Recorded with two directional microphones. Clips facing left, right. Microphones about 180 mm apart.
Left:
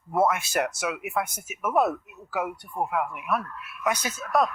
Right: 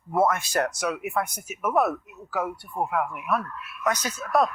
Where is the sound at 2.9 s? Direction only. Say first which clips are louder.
Right 2 dB; centre (ahead or behind).